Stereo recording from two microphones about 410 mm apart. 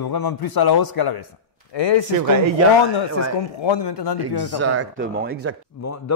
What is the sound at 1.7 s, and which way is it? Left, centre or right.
Speech, left.